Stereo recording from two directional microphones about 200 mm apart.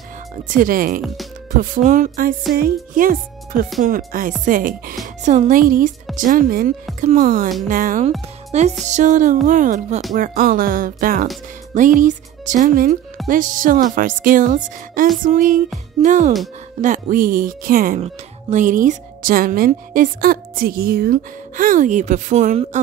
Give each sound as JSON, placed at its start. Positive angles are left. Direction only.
{"t": 0.5, "sound": "a woman's voice", "side_deg": -45}
{"t": 8.5, "sound": "music", "side_deg": -35}
{"t": 8.8, "sound": "a woman's voice", "side_deg": -35}